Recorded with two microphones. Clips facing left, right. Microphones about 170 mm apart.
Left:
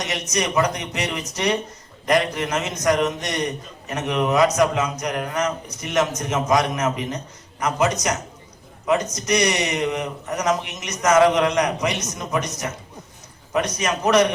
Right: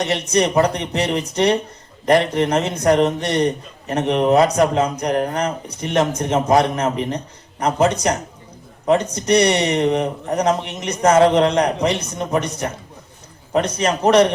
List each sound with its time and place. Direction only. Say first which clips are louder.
0.0 s a man's voice: right 7 dB; 30° right (ahead or behind)